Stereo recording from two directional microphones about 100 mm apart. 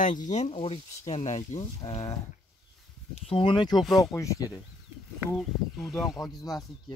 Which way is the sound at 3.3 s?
60° left (ahead or behind).